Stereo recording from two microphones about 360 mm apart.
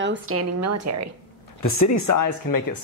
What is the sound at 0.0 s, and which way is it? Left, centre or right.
A woman's voice, right.